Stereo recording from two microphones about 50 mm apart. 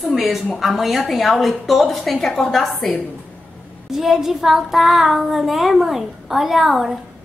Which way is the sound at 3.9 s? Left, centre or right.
Centre.